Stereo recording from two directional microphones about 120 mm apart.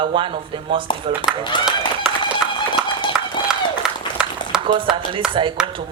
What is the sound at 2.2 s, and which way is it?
Run, 40° left (ahead or behind).